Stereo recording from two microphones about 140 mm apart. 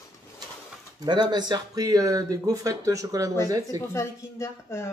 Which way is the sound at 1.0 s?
30° right (ahead or behind).